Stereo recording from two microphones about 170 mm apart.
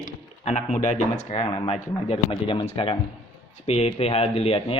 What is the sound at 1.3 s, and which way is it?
Speech, 35° left (ahead or behind).